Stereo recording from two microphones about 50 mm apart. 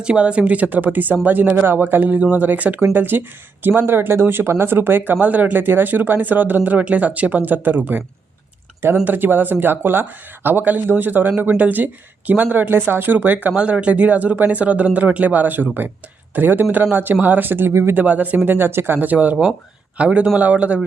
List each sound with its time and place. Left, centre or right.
0.0 s speech: right
9.0 s speech: right
17.7 s speech: right
17.9 s speech: right
18.4 s speech: right
19.0 s speech: right